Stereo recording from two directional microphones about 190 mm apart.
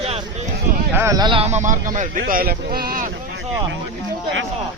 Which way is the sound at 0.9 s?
15° right (ahead or behind).